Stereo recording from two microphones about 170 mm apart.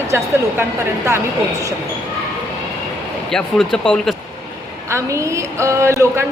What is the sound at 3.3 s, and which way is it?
Speech, 5° left (ahead or behind).